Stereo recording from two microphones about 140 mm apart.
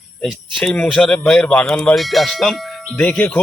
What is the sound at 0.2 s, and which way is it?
Speech, centre (ahead or behind).